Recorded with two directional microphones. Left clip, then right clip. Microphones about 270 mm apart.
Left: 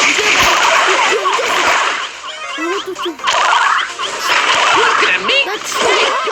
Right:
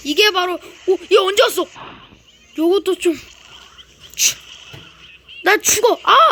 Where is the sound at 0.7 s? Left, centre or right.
Left.